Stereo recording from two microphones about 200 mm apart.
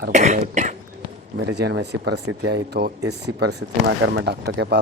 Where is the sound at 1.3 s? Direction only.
55° right (ahead or behind).